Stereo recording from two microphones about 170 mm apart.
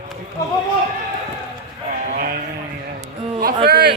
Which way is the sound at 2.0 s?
50° right (ahead or behind).